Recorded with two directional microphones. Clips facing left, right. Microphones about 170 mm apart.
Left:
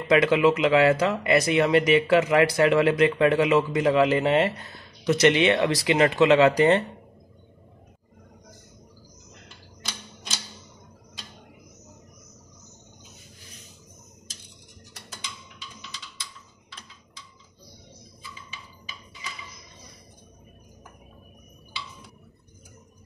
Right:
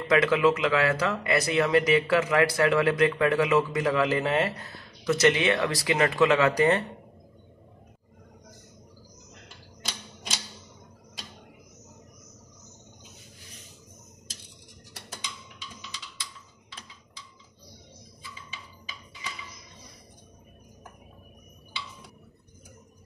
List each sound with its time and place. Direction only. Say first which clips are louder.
0.1 s speech: left 3 dB; 20° left (ahead or behind)